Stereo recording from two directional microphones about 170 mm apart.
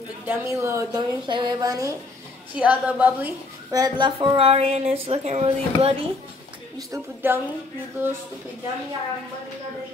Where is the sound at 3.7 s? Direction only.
25° right (ahead or behind).